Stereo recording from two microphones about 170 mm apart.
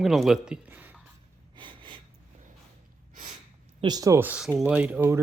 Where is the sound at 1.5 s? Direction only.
30° right (ahead or behind).